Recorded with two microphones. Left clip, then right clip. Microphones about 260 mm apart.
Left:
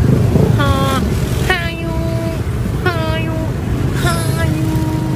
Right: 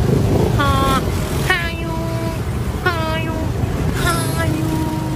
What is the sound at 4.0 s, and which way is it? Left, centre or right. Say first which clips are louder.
Vehicle: even; centre.